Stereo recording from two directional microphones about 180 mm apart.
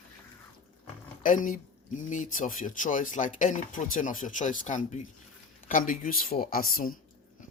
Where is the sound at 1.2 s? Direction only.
45° left (ahead or behind).